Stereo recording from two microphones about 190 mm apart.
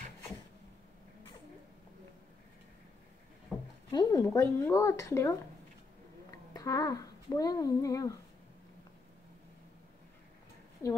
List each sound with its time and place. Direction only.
3.5 s a sound: centre (ahead or behind)
3.9 s speech: 20° left (ahead or behind)
6.5 s speech: 20° left (ahead or behind)